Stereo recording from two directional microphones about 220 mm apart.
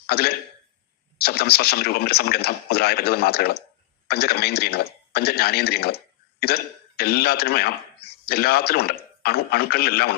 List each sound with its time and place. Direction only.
0.1 s speech: 45° left (ahead or behind)